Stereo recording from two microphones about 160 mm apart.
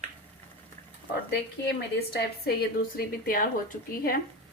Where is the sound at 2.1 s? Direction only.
85° left; by 4.2 s 65° left (ahead or behind).